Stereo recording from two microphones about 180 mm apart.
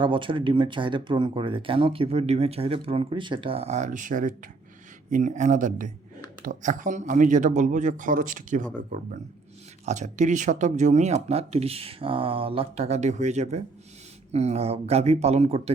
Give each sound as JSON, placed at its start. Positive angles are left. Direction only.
{"t": 0.0, "sound": "speech", "side_deg": -30}